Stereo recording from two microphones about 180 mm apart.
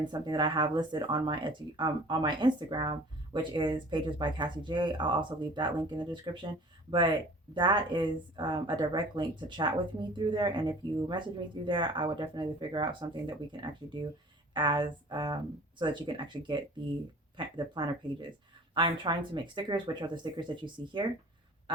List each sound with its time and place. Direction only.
0.0 s speech: 25° right (ahead or behind)